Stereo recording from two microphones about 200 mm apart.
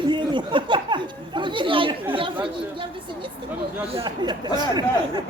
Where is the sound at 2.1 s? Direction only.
25° right (ahead or behind).